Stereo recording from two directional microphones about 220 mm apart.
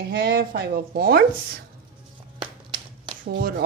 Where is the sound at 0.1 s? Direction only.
45° right (ahead or behind).